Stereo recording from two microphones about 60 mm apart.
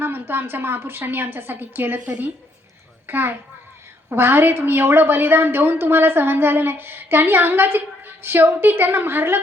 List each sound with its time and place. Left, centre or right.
0.0 s a woman's voice: right